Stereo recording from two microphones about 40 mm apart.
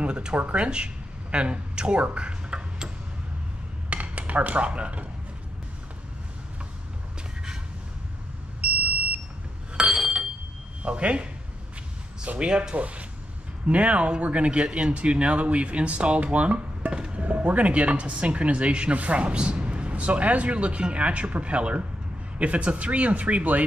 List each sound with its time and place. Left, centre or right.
0.0 s speech: right
2.1 s tick-tock: right
3.9 s dishes: right
4.3 s speech: right
8.5 s smoke detector: right
9.8 s a sound: centre
10.8 s speech: right
12.4 s speech: right
12.7 s speech: right
17.2 s speech: right